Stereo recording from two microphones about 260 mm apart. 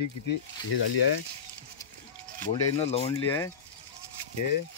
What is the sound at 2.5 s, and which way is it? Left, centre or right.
Speech, left.